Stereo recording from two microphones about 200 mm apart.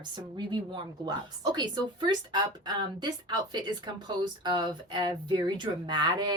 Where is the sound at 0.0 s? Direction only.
20° right (ahead or behind).